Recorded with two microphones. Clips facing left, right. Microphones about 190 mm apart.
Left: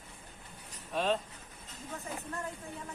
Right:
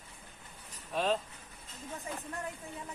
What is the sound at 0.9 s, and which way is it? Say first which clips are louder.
Speech: even; centre (ahead or behind).